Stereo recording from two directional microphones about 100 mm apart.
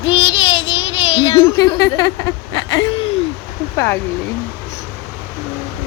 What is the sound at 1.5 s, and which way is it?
A woman's voice, 40° left (ahead or behind).